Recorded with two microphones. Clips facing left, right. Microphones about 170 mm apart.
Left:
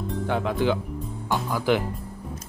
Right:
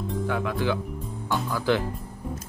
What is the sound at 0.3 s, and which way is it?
Speech, 25° left (ahead or behind).